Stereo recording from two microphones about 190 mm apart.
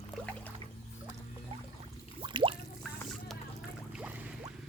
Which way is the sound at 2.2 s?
25° right (ahead or behind).